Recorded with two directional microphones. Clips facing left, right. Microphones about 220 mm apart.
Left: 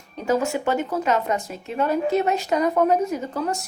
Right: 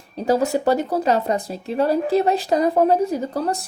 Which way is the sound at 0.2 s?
35° right (ahead or behind).